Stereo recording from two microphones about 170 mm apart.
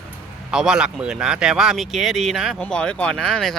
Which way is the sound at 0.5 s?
5° right (ahead or behind).